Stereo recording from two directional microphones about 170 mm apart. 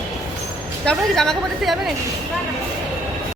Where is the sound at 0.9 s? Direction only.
Centre (ahead or behind).